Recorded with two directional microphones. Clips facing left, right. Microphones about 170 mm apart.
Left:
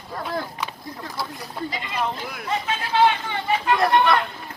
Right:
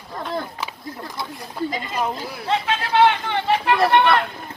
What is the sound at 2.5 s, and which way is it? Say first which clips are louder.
Speech: right 4 dB; 65° right (ahead or behind).